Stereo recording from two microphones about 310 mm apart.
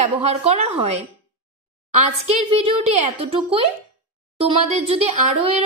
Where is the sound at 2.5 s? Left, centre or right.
Centre.